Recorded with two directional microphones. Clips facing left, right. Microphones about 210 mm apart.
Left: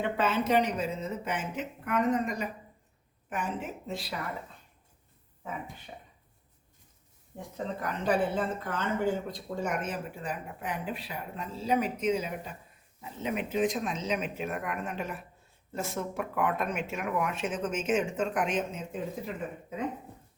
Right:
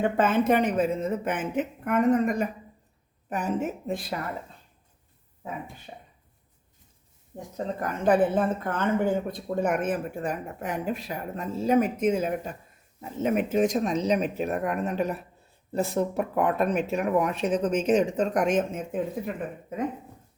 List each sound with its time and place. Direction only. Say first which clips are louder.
0.0 s a woman's voice: right 6 dB; 50° right (ahead or behind)
3.2 s a woman's voice: right 7 dB; 40° right (ahead or behind)
5.9 s speech: right 2 dB; 35° right (ahead or behind)
7.5 s a woman's voice: right 4 dB; 45° right (ahead or behind)